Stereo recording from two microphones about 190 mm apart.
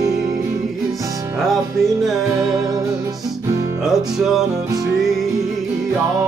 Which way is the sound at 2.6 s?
20° right (ahead or behind).